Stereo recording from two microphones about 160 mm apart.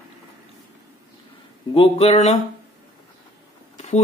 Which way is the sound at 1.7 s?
40° left (ahead or behind).